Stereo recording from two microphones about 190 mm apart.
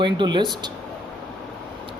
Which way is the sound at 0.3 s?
25° right (ahead or behind).